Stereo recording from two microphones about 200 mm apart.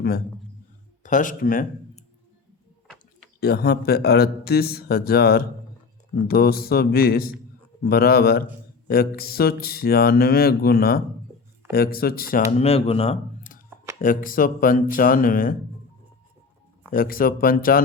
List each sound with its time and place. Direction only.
1.0 s speech: 40° left (ahead or behind)
3.4 s speech: 50° left (ahead or behind); by 13.1 s 30° left (ahead or behind)
14.0 s speech: 45° left (ahead or behind)
16.9 s speech: 45° left (ahead or behind)